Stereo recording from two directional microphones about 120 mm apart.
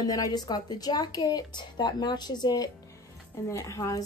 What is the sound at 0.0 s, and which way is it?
A woman's voice, 35° left (ahead or behind).